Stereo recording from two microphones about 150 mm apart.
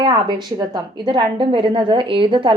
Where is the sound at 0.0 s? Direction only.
30° right (ahead or behind).